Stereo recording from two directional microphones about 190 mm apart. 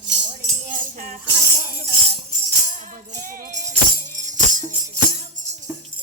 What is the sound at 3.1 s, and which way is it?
Music, 40° right (ahead or behind).